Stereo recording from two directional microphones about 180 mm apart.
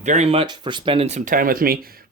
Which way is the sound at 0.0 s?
40° right (ahead or behind).